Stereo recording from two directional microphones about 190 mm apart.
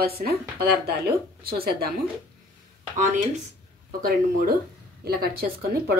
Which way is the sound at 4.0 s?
50° right (ahead or behind).